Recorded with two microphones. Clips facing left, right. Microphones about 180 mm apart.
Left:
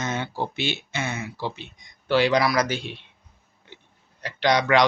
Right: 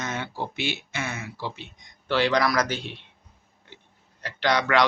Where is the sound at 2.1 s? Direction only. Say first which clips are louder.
Left 2 dB; 10° left (ahead or behind).